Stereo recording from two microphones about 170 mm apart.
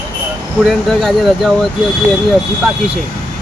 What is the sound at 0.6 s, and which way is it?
Speech, centre (ahead or behind).